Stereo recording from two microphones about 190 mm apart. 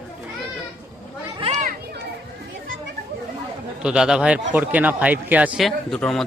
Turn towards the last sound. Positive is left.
turn(degrees=5)  # may be behind; listen again after turning